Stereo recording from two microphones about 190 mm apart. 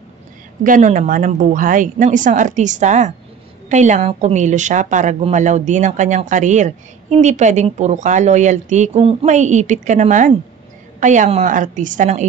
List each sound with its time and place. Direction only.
0.7 s a woman's voice: 45° right (ahead or behind)